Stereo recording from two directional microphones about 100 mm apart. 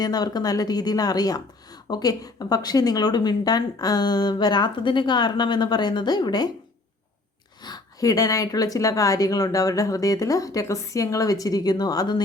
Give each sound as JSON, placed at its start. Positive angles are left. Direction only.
{"t": 0.0, "sound": "a woman's voice", "side_deg": 40}
{"t": 7.6, "sound": "a woman's voice", "side_deg": 40}